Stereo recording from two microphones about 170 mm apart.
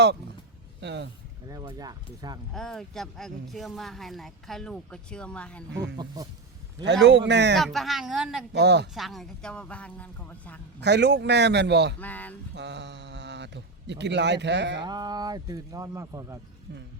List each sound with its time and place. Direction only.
0.8 s a man's voice: 90° right
1.5 s speech: 20° right (ahead or behind)
2.5 s speech: centre (ahead or behind)
5.7 s a man's voice: 90° right
7.5 s speech: centre (ahead or behind)
8.5 s a man's voice: 85° right
9.0 s speech: centre (ahead or behind)
10.8 s a man's voice: 85° right
11.9 s speech: 10° left (ahead or behind)
12.5 s speech: 90° right
14.8 s speech: 25° right (ahead or behind)